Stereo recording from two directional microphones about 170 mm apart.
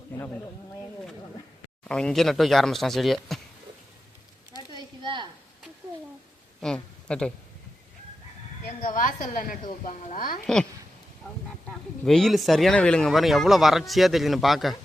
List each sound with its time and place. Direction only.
1.8 s speech: 5° left (ahead or behind)
6.6 s a woman's voice: 5° left (ahead or behind)
8.8 s a woman's voice: 50° left (ahead or behind)
10.4 s speech: 5° left (ahead or behind)
12.0 s speech: centre (ahead or behind)